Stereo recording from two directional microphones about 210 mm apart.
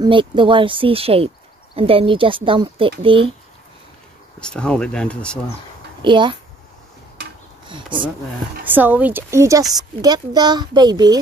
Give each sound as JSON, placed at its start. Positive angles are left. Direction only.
{"t": 0.0, "sound": "speech", "side_deg": -25}
{"t": 4.4, "sound": "speech", "side_deg": 5}
{"t": 6.0, "sound": "speech", "side_deg": -20}
{"t": 7.6, "sound": "speech", "side_deg": -25}
{"t": 8.7, "sound": "speech", "side_deg": -10}